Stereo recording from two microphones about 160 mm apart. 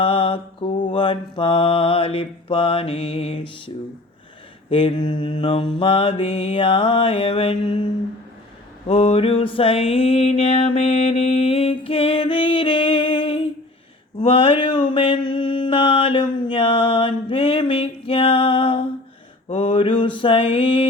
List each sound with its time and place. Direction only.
0.0 s mantra: 35° left (ahead or behind)
4.7 s mantra: 30° left (ahead or behind)
8.9 s mantra: 35° left (ahead or behind)